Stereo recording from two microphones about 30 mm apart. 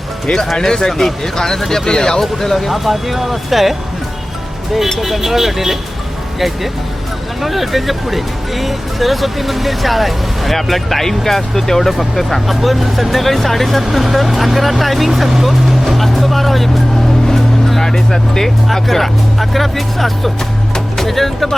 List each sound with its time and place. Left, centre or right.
0.6 s speech: centre
2.4 s speech: centre
2.6 s speech: centre
4.9 s speech: centre
7.4 s speech: centre
13.8 s speech: centre
15.9 s music: centre
17.7 s speech: centre